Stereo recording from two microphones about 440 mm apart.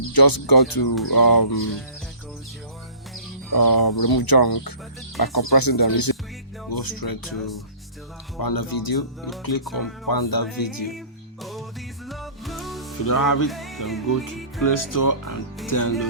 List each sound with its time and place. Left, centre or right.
0.0 s speech: left
3.5 s speech: left
8.4 s speech: left
9.6 s music: centre
10.1 s speech: left
12.0 s music: centre
13.1 s speech: left
13.5 s music: centre
14.6 s speech: left